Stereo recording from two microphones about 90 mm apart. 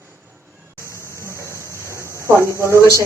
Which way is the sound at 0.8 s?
30° left (ahead or behind).